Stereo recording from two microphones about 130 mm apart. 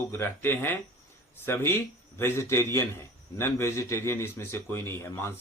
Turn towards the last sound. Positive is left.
turn(degrees=20)  # may be behind; listen again after turning